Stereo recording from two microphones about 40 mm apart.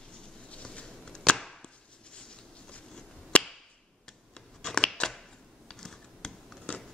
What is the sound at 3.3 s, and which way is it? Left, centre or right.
Whip, left.